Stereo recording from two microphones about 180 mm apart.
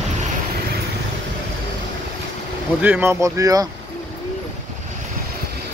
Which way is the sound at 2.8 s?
10° right (ahead or behind).